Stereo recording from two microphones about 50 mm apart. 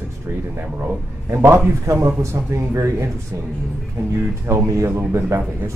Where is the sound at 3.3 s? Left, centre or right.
Right.